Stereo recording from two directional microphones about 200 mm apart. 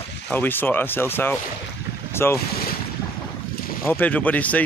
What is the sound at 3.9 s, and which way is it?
Speech, 10° left (ahead or behind).